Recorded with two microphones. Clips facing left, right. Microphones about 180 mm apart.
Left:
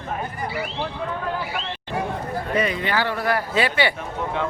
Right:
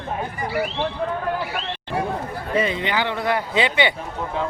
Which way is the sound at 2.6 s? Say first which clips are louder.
Right 1 dB; 25° right (ahead or behind).